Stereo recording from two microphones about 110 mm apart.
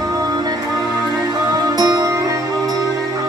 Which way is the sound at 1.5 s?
40° right (ahead or behind).